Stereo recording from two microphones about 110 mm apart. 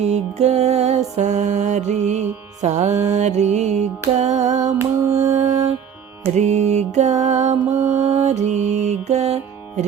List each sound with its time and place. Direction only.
0.0 s music: 85° right
6.3 s mantra: 90° right